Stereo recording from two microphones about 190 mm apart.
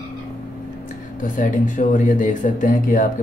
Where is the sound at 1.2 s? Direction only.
45° left (ahead or behind).